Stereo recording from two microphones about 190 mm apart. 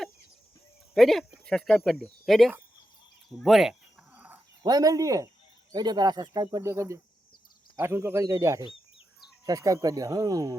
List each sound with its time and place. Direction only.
0.9 s speech: centre (ahead or behind)
3.3 s cricket: centre (ahead or behind)
4.6 s speech: 20° right (ahead or behind)